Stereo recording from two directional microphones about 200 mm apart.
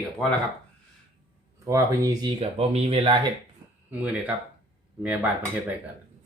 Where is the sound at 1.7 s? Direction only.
15° right (ahead or behind).